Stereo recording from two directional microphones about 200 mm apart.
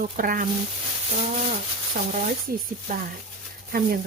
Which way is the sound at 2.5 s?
45° right (ahead or behind).